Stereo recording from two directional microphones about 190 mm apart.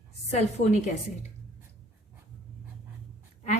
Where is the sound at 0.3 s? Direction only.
35° left (ahead or behind).